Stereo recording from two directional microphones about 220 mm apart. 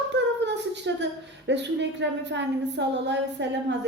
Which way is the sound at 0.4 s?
50° right (ahead or behind).